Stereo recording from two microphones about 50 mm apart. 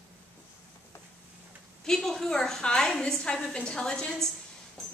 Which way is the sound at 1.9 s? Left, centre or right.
Centre.